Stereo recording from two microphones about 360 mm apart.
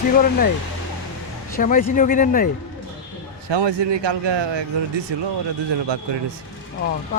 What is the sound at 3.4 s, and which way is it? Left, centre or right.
A man's voice, right.